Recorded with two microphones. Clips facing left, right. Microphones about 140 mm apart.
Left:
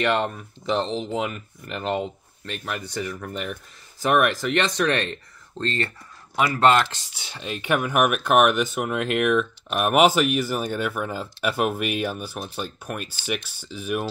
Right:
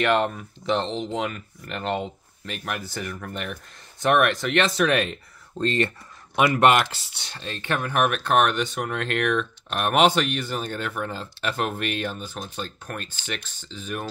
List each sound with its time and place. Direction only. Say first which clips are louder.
0.0 s speech: right 1 dB; centre (ahead or behind)
7.2 s speech: left 3 dB; 10° left (ahead or behind)